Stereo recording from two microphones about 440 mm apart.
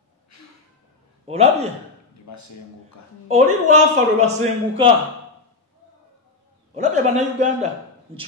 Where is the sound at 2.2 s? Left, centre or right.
Left.